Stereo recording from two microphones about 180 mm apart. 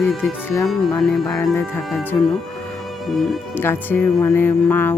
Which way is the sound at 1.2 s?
20° left (ahead or behind).